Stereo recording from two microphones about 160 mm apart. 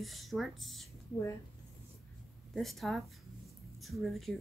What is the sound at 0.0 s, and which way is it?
Speech, centre (ahead or behind).